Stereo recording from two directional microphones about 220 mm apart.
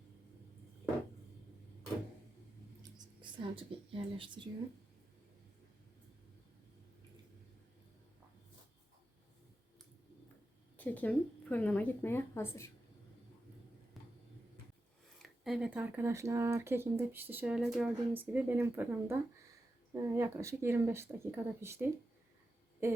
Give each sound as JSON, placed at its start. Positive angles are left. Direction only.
{"t": 2.8, "sound": "speech", "side_deg": -20}
{"t": 10.8, "sound": "speech", "side_deg": 5}
{"t": 15.2, "sound": "speech", "side_deg": 0}